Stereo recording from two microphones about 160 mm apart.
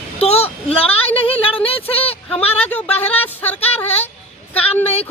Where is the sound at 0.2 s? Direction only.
40° left (ahead or behind).